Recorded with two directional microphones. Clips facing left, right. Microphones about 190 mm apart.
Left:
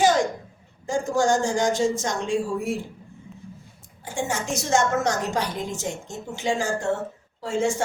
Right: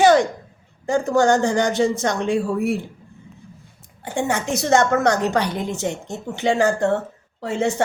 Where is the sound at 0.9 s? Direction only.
65° right (ahead or behind).